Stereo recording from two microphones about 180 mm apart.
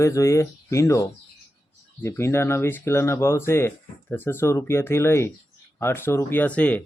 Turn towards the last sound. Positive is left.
turn(degrees=5)  # may be behind; listen again after turning